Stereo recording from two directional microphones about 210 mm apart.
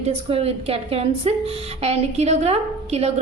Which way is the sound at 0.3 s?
30° right (ahead or behind).